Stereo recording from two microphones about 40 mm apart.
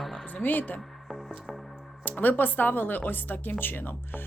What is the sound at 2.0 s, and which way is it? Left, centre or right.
A woman's voice, left.